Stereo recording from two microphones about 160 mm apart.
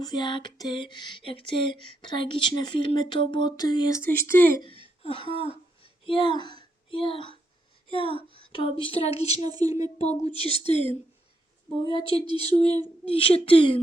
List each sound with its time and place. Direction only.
0.0 s a sound: 25° left (ahead or behind)
4.0 s speech: 15° left (ahead or behind)
5.0 s a woman's voice: 35° left (ahead or behind)
9.4 s speech: 25° right (ahead or behind)
10.0 s a woman's voice: 40° left (ahead or behind)